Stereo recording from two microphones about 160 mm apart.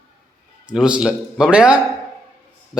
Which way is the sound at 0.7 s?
5° right (ahead or behind).